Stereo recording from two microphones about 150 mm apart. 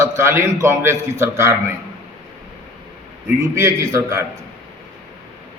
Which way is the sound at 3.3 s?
20° right (ahead or behind).